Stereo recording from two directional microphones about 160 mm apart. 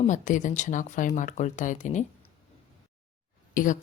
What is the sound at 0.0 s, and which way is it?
Speech, 50° left (ahead or behind).